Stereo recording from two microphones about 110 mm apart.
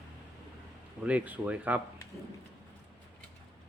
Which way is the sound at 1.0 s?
15° right (ahead or behind).